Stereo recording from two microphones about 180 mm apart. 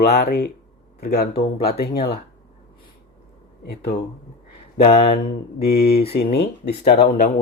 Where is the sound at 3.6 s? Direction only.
60° left (ahead or behind).